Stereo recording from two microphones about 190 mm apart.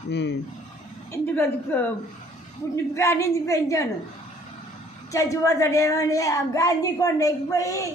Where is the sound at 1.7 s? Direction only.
10° left (ahead or behind).